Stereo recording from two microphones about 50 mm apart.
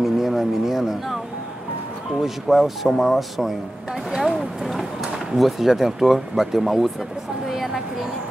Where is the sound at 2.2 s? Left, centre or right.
Centre.